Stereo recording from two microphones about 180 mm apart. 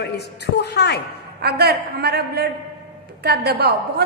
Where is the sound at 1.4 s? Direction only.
60° right (ahead or behind).